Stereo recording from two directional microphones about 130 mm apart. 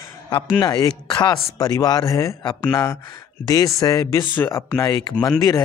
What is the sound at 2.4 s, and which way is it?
Speech, 40° left (ahead or behind).